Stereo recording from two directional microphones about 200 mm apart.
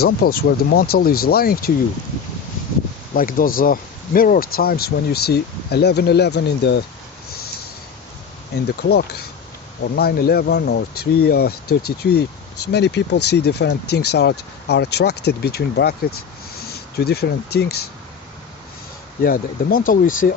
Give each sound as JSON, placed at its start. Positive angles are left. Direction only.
{"t": 0.0, "sound": "speech", "side_deg": 50}
{"t": 3.2, "sound": "speech", "side_deg": 45}
{"t": 8.5, "sound": "speech", "side_deg": 55}
{"t": 19.2, "sound": "speech", "side_deg": 45}